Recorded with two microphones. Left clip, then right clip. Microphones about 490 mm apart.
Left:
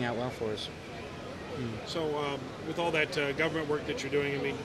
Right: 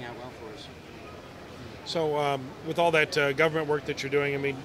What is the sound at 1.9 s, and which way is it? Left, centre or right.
A man's voice, right.